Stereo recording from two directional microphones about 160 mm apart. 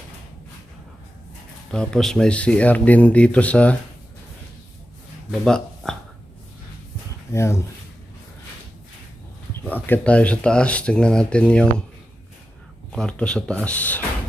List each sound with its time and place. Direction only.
1.7 s speech: 5° left (ahead or behind)
5.3 s a sound: 5° left (ahead or behind)
7.3 s speech: 15° left (ahead or behind)
9.6 s speech: 10° left (ahead or behind)
12.9 s speech: 5° left (ahead or behind)